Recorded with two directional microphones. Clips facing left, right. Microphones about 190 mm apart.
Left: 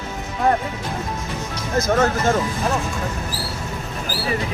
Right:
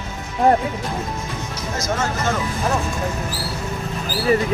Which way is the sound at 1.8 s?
55° left (ahead or behind).